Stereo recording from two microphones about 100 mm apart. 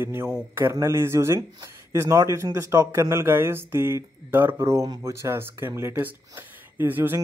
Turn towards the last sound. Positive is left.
turn(degrees=-20)  # may be behind; listen again after turning